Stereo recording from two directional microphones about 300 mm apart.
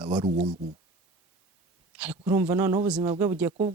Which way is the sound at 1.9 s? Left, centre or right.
Centre.